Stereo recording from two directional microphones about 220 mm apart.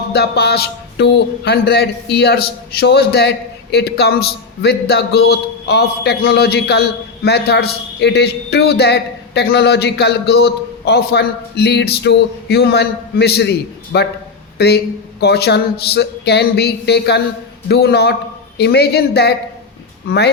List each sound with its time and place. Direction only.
0.1 s speech: 50° left (ahead or behind)